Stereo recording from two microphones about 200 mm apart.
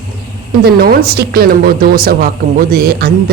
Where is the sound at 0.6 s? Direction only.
50° right (ahead or behind).